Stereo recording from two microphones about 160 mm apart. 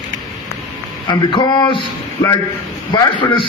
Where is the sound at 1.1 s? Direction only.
30° left (ahead or behind).